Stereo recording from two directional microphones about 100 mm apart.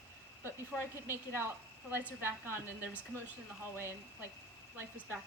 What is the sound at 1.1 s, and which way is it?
Speech, 20° right (ahead or behind).